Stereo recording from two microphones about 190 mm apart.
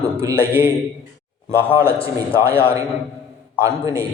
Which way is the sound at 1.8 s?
30° left (ahead or behind).